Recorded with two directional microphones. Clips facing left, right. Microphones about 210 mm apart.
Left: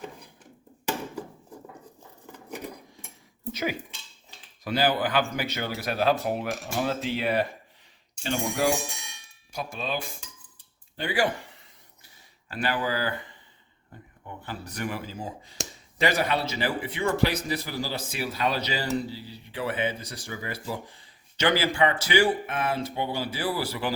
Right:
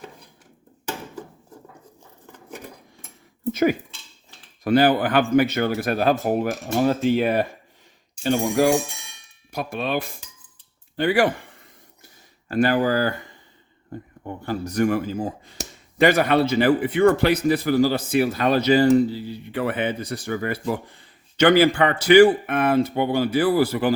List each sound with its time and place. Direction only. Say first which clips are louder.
3.5 s a man's voice: right 10 dB; 50° right (ahead or behind)
12.0 s speech: right 10 dB; 45° right (ahead or behind)
14.4 s a man's voice: right 12 dB; 45° right (ahead or behind)